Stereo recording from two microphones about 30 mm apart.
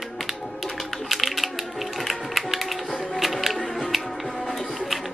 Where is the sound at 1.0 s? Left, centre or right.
Centre.